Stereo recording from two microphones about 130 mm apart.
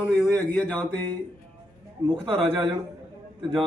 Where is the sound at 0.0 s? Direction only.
20° left (ahead or behind).